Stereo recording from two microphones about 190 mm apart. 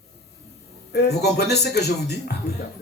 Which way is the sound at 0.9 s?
60° left (ahead or behind).